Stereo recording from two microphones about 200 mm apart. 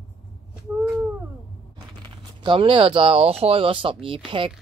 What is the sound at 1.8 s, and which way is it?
Speech, 25° right (ahead or behind).